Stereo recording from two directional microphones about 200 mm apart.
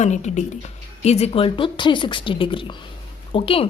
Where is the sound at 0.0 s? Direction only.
35° left (ahead or behind).